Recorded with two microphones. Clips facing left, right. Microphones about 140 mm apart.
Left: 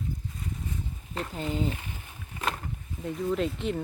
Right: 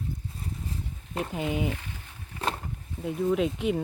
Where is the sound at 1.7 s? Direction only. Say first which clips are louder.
Even; 15° left (ahead or behind).